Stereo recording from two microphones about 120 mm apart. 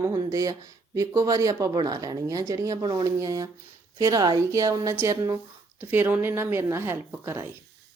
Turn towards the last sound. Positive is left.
turn(degrees=-20)  # may be behind; listen again after turning